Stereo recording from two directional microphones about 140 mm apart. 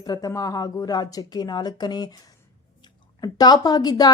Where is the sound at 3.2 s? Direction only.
30° left (ahead or behind).